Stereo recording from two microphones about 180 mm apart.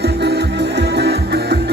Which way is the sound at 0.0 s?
65° right (ahead or behind).